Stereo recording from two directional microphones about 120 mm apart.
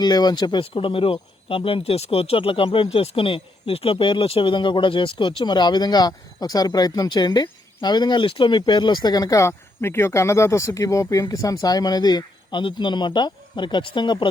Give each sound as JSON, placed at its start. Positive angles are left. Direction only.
{"t": 0.0, "sound": "speech", "side_deg": 35}
{"t": 0.7, "sound": "speech", "side_deg": 45}